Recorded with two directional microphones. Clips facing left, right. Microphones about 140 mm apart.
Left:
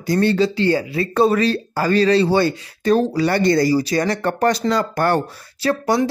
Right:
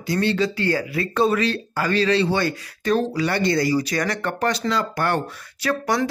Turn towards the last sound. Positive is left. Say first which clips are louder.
# left 4 dB
turn(degrees=25)  # may be behind; listen again after turning